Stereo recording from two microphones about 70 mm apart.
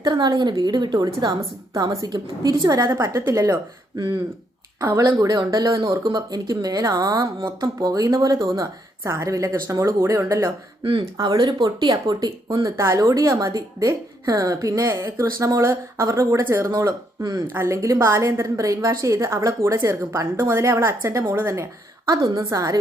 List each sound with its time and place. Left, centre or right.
0.0 s a woman's voice: right
4.8 s a woman's voice: right
5.1 s a woman's voice: right
9.0 s a woman's voice: right
10.9 s speech: right
12.6 s a woman's voice: right
22.0 s a woman's voice: right
22.4 s a woman's voice: right